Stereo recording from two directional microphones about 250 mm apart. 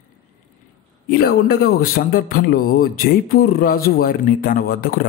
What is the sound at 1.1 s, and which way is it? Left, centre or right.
Speech, left.